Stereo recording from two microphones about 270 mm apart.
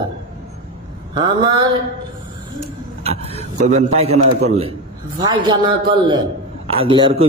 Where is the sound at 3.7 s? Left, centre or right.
Right.